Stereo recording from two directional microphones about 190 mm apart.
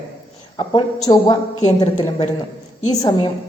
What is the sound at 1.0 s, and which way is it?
Speech, 20° left (ahead or behind).